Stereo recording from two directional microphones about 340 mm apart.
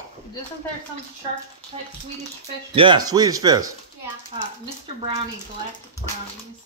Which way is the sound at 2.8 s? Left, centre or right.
Centre.